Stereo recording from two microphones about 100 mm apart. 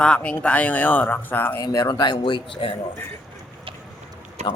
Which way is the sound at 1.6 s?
35° left (ahead or behind).